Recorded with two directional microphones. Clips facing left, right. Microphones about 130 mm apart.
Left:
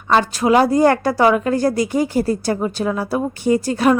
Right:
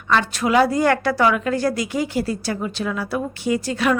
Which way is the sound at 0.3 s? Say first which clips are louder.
Left 3 dB; 35° left (ahead or behind).